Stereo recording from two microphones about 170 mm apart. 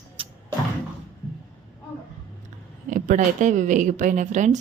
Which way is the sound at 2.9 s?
50° right (ahead or behind).